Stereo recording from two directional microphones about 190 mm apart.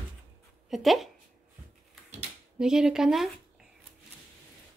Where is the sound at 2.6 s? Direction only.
5° right (ahead or behind).